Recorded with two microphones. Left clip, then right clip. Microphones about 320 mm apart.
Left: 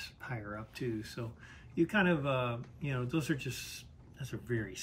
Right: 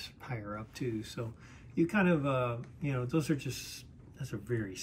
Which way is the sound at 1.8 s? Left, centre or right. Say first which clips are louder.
Right 1 dB; centre.